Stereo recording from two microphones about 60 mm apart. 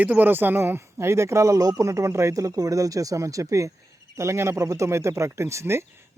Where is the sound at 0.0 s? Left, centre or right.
Right.